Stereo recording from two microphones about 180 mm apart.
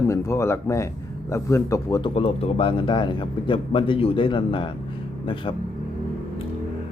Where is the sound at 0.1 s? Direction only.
15° left (ahead or behind).